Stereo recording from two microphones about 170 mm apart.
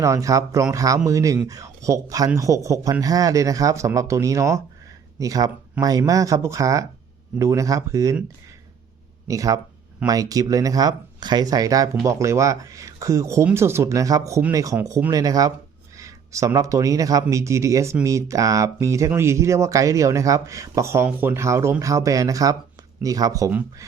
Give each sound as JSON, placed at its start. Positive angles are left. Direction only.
{"t": 0.0, "sound": "speech", "side_deg": -20}
{"t": 9.2, "sound": "speech", "side_deg": -20}
{"t": 23.5, "sound": "speech", "side_deg": -10}